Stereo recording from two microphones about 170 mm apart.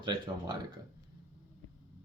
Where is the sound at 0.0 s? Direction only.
25° right (ahead or behind).